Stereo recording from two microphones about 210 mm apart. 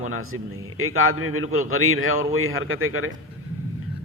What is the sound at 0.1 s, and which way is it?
A man's voice, 80° right.